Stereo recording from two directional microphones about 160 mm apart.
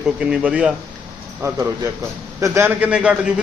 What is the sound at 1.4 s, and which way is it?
A man's voice, 20° right (ahead or behind).